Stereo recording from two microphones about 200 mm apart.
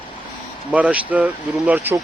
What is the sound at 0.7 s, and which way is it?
Speech, 5° right (ahead or behind).